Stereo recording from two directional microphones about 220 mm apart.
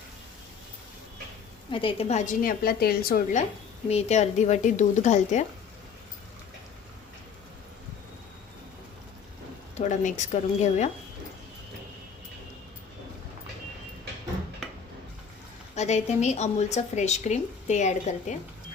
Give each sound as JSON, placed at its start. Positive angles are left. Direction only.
{"t": 1.7, "sound": "speech", "side_deg": 25}
{"t": 3.8, "sound": "speech", "side_deg": 30}
{"t": 9.7, "sound": "speech", "side_deg": 35}
{"t": 15.7, "sound": "speech", "side_deg": 30}